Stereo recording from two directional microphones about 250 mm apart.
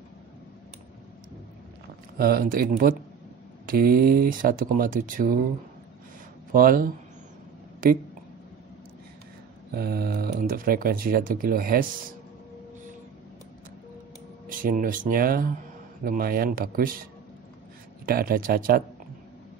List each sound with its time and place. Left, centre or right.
2.1 s speech: right
6.5 s speech: right
9.7 s speech: right
14.6 s speech: right